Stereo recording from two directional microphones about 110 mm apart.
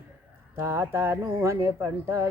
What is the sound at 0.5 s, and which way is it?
Speech, 20° right (ahead or behind).